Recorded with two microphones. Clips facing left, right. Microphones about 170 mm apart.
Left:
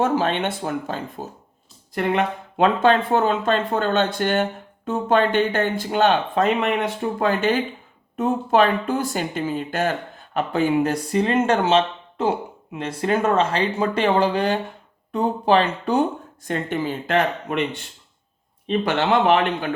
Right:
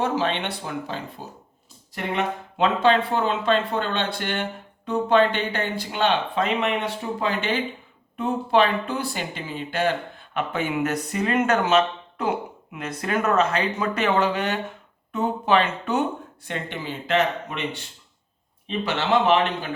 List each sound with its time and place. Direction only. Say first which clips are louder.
0.0 s speech: left 4 dB; 50° left (ahead or behind)
18.9 s speech: left 2 dB; 50° left (ahead or behind)